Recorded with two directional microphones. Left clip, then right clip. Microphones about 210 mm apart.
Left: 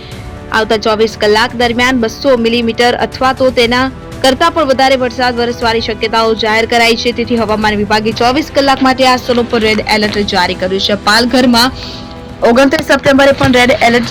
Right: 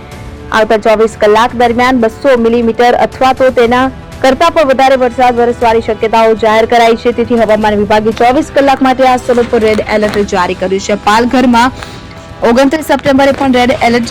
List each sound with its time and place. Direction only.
0.9 s speech: centre (ahead or behind)
9.1 s speech: 5° left (ahead or behind)
9.9 s a woman's voice: 10° right (ahead or behind); by 14.1 s 35° right (ahead or behind)